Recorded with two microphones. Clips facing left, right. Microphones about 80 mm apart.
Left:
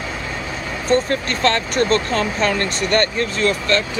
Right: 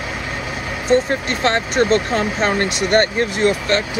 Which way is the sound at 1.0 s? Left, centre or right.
Right.